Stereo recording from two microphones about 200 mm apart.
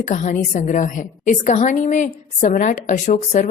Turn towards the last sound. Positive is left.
turn(degrees=35)  # may be behind; listen again after turning